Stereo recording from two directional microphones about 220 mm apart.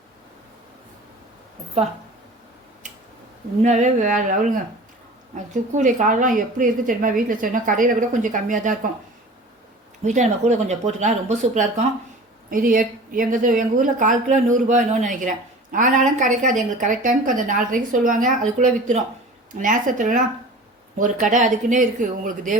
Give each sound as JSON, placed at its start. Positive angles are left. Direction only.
{"t": 3.6, "sound": "a woman's voice", "side_deg": -30}
{"t": 5.7, "sound": "a woman's voice", "side_deg": -35}
{"t": 10.0, "sound": "a woman's voice", "side_deg": -30}